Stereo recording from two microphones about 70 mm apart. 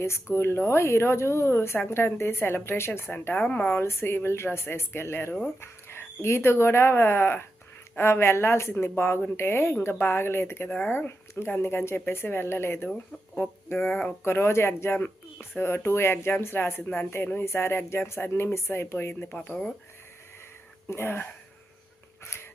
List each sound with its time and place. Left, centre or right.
0.0 s speech: left
3.8 s speech: left
10.7 s speech: centre
10.9 s speech: left
19.4 s speech: centre
20.8 s speech: left